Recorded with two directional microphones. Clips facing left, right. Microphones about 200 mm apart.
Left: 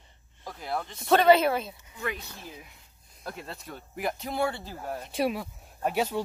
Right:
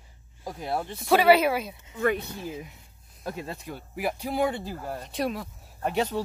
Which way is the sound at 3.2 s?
15° right (ahead or behind).